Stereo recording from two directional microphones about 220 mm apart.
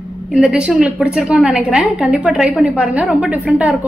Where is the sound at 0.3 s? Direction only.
5° right (ahead or behind).